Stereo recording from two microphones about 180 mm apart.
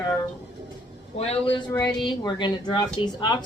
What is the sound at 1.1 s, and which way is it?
A woman's voice, 35° left (ahead or behind).